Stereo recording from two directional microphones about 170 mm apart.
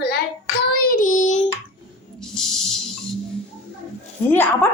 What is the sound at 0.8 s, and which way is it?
Child singing, 55° left (ahead or behind).